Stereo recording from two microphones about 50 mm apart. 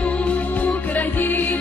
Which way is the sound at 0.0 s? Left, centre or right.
Left.